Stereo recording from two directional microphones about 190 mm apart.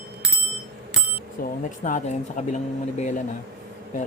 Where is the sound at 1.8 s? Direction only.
40° left (ahead or behind).